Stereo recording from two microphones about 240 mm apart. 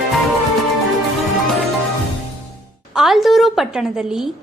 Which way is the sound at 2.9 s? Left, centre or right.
Centre.